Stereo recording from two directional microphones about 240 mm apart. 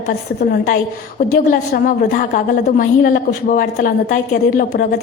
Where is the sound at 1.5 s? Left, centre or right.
Left.